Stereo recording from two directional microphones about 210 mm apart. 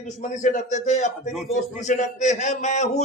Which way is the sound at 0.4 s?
35° left (ahead or behind).